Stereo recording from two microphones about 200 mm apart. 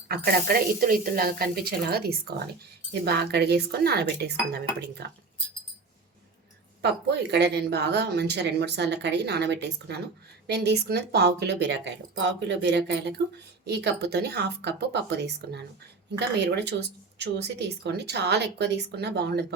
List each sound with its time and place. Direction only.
0.3 s speech: 45° right (ahead or behind)
6.8 s speech: 60° right (ahead or behind)